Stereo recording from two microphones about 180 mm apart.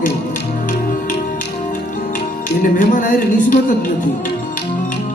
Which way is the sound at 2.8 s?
45° left (ahead or behind).